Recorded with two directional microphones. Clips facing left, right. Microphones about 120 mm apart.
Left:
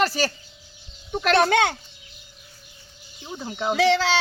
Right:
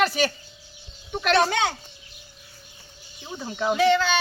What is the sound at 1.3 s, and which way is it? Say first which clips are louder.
Speech: left 2 dB; 60° left (ahead or behind).